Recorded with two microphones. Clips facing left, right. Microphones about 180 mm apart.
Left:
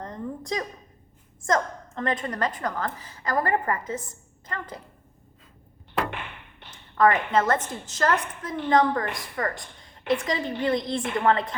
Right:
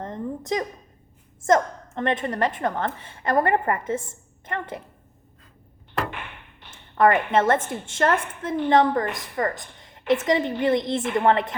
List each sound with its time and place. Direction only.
0.0 s a sound: 20° right (ahead or behind)
1.4 s a woman's voice: 25° right (ahead or behind)
6.7 s a woman's voice: 25° right (ahead or behind)